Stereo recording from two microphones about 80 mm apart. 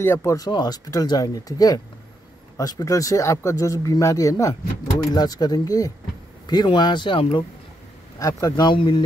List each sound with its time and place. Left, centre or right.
0.0 s speech: left
0.5 s speech: left
0.8 s speech: left
5.1 s speech: left
6.4 s speech: left
8.2 s speech: left
8.6 s speech: left